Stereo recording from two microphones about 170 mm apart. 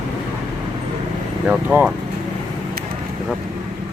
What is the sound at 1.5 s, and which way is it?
Speech, 10° right (ahead or behind).